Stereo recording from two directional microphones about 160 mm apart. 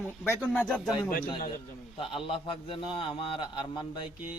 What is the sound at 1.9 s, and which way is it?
A man's voice, 35° left (ahead or behind).